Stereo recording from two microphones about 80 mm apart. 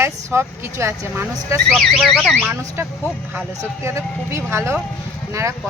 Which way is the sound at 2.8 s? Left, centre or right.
Right.